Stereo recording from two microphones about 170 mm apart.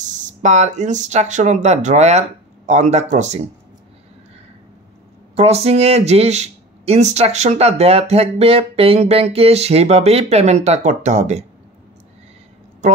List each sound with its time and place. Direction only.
0.0 s speech: 45° right (ahead or behind)
5.3 s speech: 35° right (ahead or behind)
12.8 s a woman's voice: 45° right (ahead or behind)